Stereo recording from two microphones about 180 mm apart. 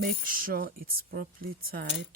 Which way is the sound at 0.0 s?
50° right (ahead or behind).